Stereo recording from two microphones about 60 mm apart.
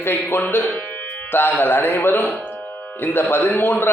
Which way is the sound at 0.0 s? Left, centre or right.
Left.